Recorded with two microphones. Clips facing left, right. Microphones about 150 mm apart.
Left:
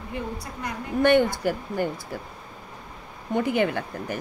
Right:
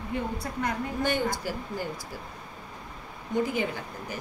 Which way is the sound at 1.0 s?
60° left (ahead or behind).